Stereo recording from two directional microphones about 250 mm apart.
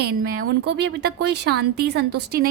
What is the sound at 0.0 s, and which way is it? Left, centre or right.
A woman's voice, right.